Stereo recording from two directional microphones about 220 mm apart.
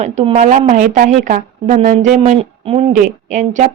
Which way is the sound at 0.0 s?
30° right (ahead or behind).